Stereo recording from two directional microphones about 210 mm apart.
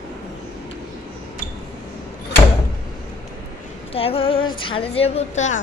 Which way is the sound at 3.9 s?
25° left (ahead or behind).